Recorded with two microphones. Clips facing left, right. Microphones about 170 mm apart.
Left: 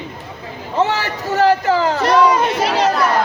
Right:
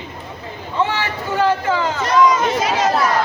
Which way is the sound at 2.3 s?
65° left (ahead or behind).